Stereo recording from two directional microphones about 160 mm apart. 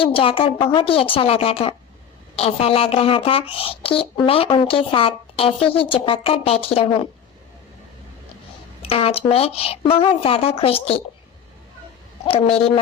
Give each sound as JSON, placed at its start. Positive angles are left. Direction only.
{"t": 0.0, "sound": "a woman's voice", "side_deg": 35}
{"t": 8.8, "sound": "a woman's voice", "side_deg": 35}
{"t": 12.2, "sound": "a woman's voice", "side_deg": 35}